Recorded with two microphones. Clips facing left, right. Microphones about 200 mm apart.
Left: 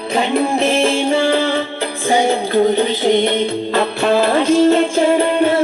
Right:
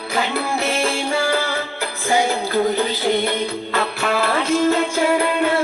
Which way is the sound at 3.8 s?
25° left (ahead or behind).